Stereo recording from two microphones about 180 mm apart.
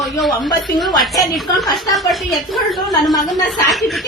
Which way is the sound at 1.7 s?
Centre (ahead or behind).